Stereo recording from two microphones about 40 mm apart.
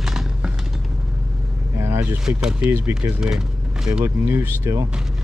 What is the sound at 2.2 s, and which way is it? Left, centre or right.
Speech, centre.